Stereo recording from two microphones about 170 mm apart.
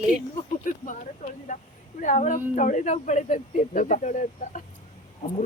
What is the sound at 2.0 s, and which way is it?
Speech, 45° left (ahead or behind).